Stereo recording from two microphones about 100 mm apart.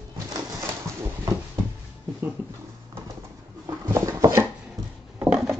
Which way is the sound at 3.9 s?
35° right (ahead or behind).